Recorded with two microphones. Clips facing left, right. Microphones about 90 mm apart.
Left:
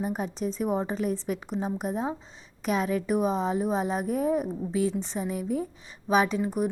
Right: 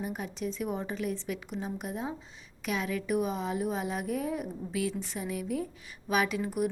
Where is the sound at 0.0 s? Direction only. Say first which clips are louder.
Left 5 dB; 40° left (ahead or behind).